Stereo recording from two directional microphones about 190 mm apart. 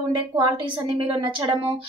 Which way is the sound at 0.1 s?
25° right (ahead or behind).